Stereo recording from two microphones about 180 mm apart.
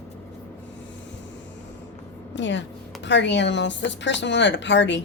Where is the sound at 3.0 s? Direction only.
75° left (ahead or behind).